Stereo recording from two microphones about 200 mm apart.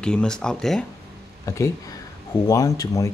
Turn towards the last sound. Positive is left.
turn(degrees=15)  # may be behind; listen again after turning